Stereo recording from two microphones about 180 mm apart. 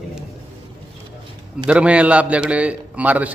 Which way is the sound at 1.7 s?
5° right (ahead or behind).